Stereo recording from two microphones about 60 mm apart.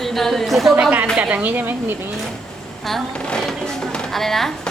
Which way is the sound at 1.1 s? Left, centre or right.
Right.